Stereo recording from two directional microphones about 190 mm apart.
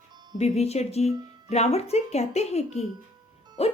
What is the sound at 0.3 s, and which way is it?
A woman's voice, 35° left (ahead or behind).